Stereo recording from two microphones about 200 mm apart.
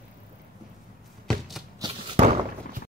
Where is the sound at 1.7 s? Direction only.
25° right (ahead or behind).